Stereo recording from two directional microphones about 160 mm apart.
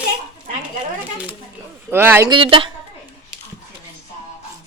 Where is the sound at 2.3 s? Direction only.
35° right (ahead or behind).